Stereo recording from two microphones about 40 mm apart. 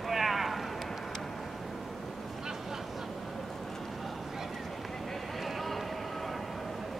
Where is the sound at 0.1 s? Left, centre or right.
Centre.